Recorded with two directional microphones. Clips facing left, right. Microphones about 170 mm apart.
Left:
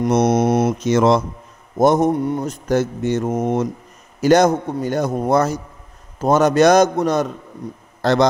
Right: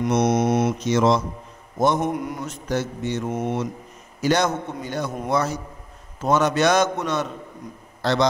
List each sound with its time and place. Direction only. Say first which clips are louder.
0.0 s a man's voice: left 4 dB; 45° left (ahead or behind)
1.8 s a man's voice: left 6 dB; 40° left (ahead or behind)